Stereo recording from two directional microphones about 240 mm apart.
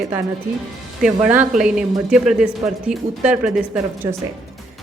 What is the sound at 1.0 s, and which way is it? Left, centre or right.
Speech, centre.